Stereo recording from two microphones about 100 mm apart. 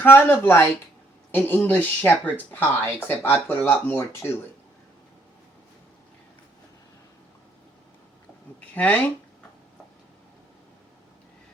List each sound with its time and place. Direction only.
0.3 s speech: 25° left (ahead or behind)
8.7 s speech: 15° left (ahead or behind)